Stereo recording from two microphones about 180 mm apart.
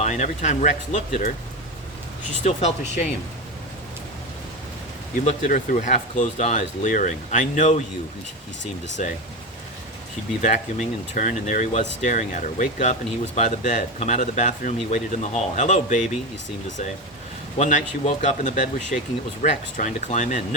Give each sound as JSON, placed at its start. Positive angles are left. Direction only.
{"t": 0.0, "sound": "speech", "side_deg": 40}
{"t": 2.4, "sound": "speech", "side_deg": 40}
{"t": 5.2, "sound": "speech", "side_deg": 40}
{"t": 10.4, "sound": "speech", "side_deg": 45}
{"t": 17.6, "sound": "speech", "side_deg": 40}